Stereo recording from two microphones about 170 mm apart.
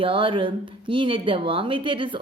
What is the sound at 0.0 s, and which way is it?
Speech, 30° right (ahead or behind).